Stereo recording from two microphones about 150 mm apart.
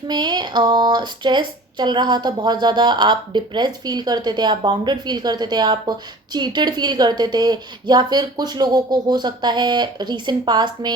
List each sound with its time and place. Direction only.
0.1 s speech: 30° right (ahead or behind)